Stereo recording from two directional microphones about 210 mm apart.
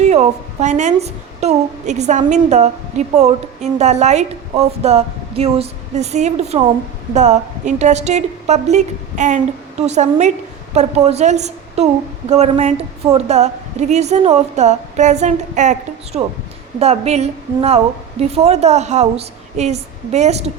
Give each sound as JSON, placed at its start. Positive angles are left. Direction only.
{"t": 0.0, "sound": "a woman's voice", "side_deg": -35}